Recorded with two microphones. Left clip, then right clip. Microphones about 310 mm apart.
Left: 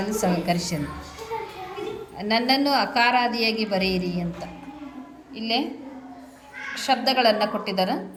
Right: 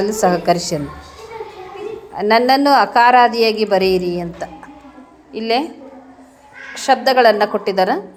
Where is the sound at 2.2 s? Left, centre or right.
Centre.